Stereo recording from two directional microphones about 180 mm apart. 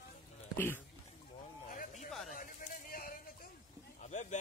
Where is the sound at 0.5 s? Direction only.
10° left (ahead or behind).